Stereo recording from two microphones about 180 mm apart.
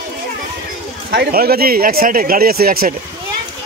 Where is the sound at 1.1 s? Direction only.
60° right (ahead or behind).